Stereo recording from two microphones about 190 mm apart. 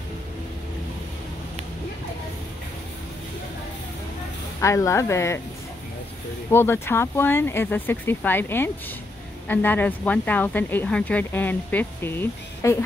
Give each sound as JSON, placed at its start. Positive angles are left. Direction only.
{"t": 4.6, "sound": "speech", "side_deg": 15}
{"t": 6.5, "sound": "speech", "side_deg": 10}